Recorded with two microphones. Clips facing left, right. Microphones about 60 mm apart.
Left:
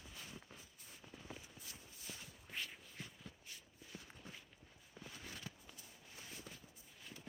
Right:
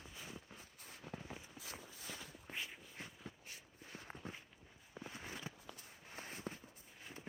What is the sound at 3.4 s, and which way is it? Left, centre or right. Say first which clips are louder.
Walk: right 2 dB; right.